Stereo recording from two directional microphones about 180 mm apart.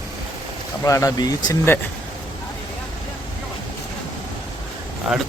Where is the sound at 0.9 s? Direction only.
20° left (ahead or behind).